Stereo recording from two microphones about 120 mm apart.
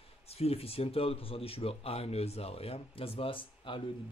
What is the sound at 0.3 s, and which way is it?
Speech, 55° left (ahead or behind).